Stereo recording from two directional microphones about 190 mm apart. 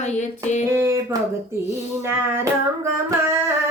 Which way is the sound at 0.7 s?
15° right (ahead or behind).